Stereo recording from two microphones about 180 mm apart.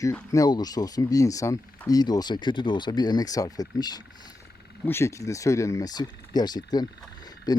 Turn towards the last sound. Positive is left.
turn(degrees=20)  # may be behind; listen again after turning